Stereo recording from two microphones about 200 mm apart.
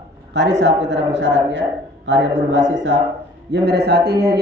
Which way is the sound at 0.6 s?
60° right (ahead or behind).